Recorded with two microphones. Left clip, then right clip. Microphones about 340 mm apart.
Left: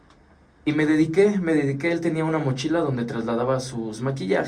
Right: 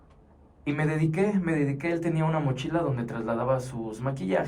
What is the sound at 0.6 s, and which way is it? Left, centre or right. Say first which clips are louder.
Speech: left 8 dB; centre.